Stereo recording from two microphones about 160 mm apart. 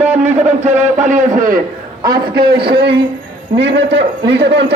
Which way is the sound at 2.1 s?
75° right (ahead or behind).